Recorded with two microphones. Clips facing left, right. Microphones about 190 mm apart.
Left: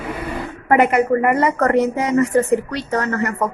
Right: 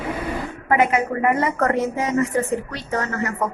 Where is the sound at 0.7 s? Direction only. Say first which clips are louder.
Left 5 dB; 65° left (ahead or behind).